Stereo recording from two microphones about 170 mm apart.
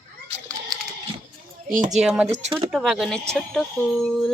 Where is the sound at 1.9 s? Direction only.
5° right (ahead or behind).